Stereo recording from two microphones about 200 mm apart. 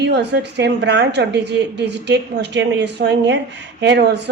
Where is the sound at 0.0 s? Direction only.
60° right (ahead or behind).